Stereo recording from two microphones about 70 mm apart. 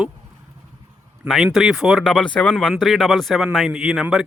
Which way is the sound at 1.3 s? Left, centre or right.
Centre.